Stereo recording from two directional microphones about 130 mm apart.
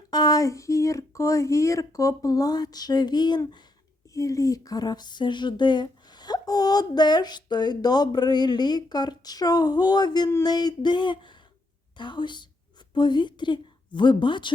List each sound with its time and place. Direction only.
0.1 s a woman's voice: 30° left (ahead or behind)